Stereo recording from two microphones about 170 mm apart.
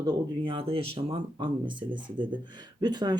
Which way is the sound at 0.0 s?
25° right (ahead or behind).